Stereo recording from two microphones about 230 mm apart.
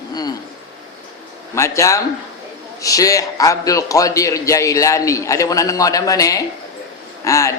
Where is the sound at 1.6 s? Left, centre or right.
Centre.